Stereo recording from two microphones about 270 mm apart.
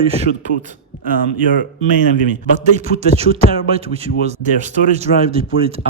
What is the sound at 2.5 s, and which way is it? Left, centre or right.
Speech, right.